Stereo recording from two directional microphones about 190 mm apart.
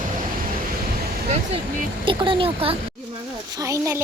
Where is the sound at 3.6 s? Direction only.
15° right (ahead or behind).